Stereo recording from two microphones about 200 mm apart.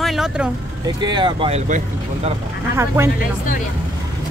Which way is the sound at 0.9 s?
20° right (ahead or behind).